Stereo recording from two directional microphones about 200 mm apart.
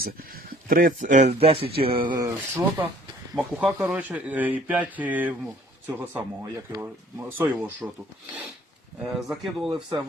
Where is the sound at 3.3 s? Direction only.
5° right (ahead or behind).